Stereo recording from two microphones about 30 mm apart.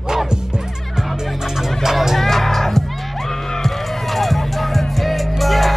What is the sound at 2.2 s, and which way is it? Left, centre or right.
Music, centre.